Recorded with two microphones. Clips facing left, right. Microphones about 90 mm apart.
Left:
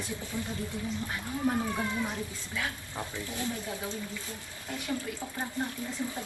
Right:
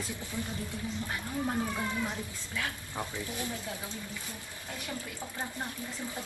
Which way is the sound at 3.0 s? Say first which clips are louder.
Right 1 dB; 15° right (ahead or behind).